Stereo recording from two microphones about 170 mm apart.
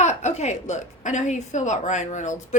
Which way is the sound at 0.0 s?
40° left (ahead or behind).